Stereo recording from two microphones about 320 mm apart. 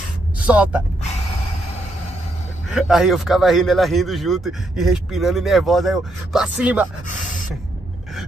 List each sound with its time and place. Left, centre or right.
0.4 s speech: centre
2.7 s a man's voice: centre
7.1 s gasp: left